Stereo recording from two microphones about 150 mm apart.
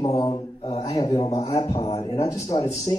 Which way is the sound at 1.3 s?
45° left (ahead or behind).